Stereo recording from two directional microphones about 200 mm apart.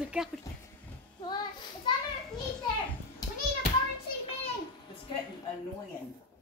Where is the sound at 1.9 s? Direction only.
20° left (ahead or behind).